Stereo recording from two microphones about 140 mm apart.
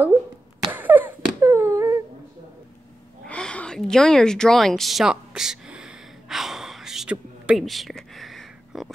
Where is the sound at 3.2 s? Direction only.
5° left (ahead or behind).